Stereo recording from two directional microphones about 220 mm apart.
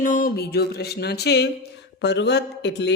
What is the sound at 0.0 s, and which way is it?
Speech, 35° left (ahead or behind).